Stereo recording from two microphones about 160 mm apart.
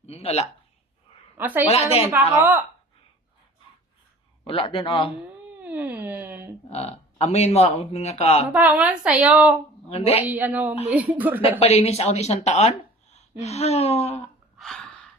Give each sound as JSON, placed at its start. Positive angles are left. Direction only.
{"t": 0.0, "sound": "a sound", "side_deg": 40}
{"t": 1.4, "sound": "a woman's voice", "side_deg": -10}
{"t": 1.6, "sound": "speech", "side_deg": 40}
{"t": 2.1, "sound": "a woman's voice", "side_deg": -10}
{"t": 4.4, "sound": "speech", "side_deg": 30}
{"t": 5.6, "sound": "a sound", "side_deg": -10}
{"t": 6.7, "sound": "speech", "side_deg": 40}
{"t": 8.5, "sound": "a woman's voice", "side_deg": -10}
{"t": 9.9, "sound": "speech", "side_deg": 40}
{"t": 10.2, "sound": "a woman's voice", "side_deg": -10}
{"t": 11.6, "sound": "speech", "side_deg": 40}